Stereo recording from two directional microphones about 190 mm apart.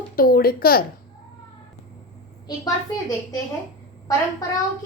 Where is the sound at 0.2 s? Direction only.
50° left (ahead or behind).